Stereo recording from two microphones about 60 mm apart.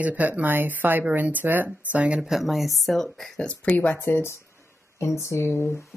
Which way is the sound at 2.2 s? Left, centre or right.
Centre.